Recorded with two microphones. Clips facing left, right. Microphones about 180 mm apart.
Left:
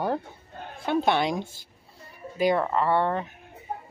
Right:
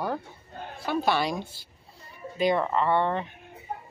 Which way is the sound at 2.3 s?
10° left (ahead or behind).